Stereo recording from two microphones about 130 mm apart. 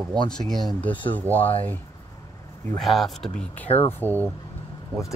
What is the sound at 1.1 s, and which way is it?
Speech, 15° left (ahead or behind).